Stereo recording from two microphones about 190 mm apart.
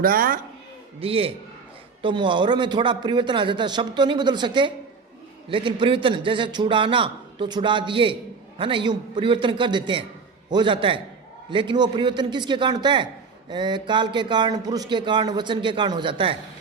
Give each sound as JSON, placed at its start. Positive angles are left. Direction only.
{"t": 0.0, "sound": "speech", "side_deg": -50}
{"t": 0.9, "sound": "a man's voice", "side_deg": -30}